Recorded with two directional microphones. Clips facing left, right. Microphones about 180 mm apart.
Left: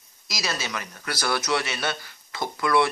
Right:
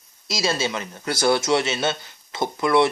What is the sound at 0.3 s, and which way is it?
Speech, 25° right (ahead or behind).